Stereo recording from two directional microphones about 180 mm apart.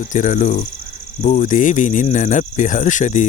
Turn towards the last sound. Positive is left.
turn(degrees=45)  # may be behind; listen again after turning